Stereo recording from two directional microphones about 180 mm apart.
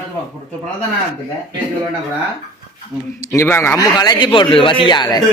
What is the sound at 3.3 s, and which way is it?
A man's voice, 15° left (ahead or behind).